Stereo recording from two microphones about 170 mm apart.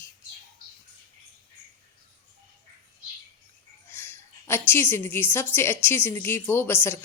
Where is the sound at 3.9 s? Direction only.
15° left (ahead or behind).